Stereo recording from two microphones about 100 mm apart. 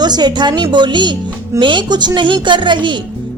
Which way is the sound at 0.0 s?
45° right (ahead or behind).